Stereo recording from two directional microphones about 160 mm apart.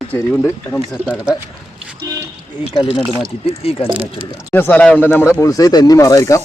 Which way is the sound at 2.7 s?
35° left (ahead or behind).